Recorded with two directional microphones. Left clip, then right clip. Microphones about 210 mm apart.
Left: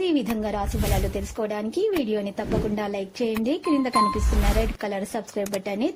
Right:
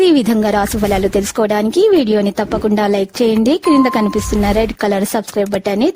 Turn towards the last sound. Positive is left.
turn(degrees=-55)  # may be behind; listen again after turning